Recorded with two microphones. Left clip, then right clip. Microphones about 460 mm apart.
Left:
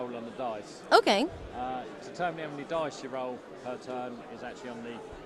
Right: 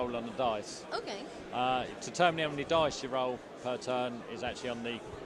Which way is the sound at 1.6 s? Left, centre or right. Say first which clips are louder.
Right 5 dB; right.